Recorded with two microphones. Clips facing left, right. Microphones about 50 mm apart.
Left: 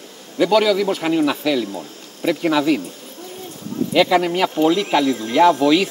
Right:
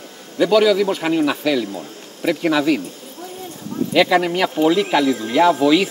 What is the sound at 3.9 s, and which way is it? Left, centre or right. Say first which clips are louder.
A man's voice: even; centre.